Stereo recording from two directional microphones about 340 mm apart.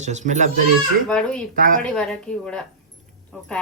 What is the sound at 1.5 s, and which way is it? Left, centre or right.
Speech, right.